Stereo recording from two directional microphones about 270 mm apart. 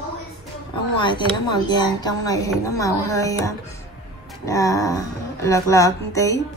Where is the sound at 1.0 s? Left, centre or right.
Centre.